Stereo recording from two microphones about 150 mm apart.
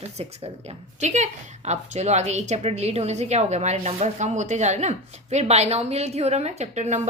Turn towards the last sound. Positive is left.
turn(degrees=-50)  # may be behind; listen again after turning